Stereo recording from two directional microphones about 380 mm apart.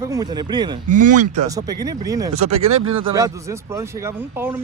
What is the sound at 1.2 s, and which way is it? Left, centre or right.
Speech, centre.